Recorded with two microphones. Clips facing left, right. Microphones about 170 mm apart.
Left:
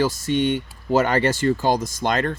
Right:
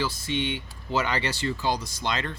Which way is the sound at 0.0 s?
45° left (ahead or behind).